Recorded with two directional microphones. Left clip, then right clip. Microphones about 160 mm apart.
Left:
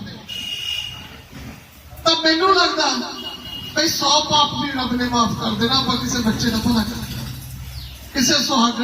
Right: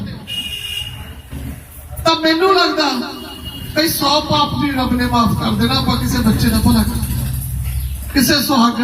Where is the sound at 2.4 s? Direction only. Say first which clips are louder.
Right 3 dB; 5° right (ahead or behind).